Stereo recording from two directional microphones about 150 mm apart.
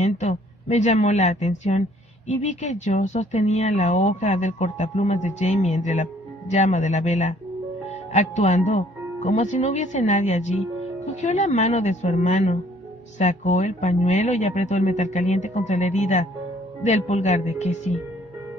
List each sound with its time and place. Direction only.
0.0 s a woman's voice: 50° left (ahead or behind)